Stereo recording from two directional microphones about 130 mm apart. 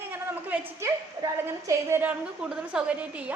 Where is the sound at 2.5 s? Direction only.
5° right (ahead or behind).